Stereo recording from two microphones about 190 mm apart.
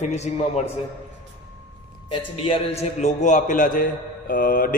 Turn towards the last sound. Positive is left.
turn(degrees=50)  # may be behind; listen again after turning